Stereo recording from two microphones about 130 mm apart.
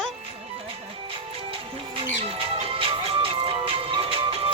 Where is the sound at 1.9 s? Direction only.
50° right (ahead or behind).